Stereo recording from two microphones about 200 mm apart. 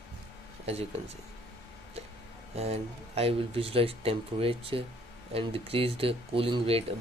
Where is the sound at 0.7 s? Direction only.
30° right (ahead or behind).